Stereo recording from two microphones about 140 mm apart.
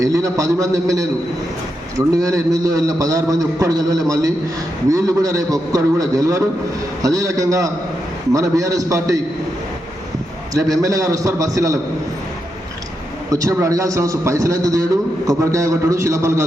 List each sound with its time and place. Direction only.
0.0 s a man's voice: 25° right (ahead or behind)
10.5 s a man's voice: 25° right (ahead or behind)
13.3 s a man's voice: 25° right (ahead or behind)